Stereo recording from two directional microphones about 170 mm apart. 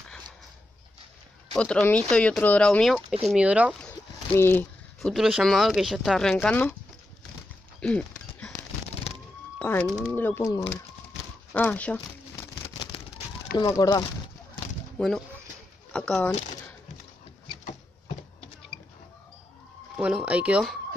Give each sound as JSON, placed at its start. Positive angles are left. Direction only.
{"t": 1.6, "sound": "speech", "side_deg": 10}
{"t": 3.8, "sound": "a sound", "side_deg": 10}
{"t": 5.1, "sound": "speech", "side_deg": 0}
{"t": 7.8, "sound": "a sound", "side_deg": 5}
{"t": 9.1, "sound": "music", "side_deg": 35}
{"t": 9.6, "sound": "speech", "side_deg": 10}
{"t": 12.6, "sound": "a sound", "side_deg": 30}
{"t": 13.6, "sound": "speech", "side_deg": 25}
{"t": 15.0, "sound": "speech", "side_deg": 0}
{"t": 20.0, "sound": "speech", "side_deg": -5}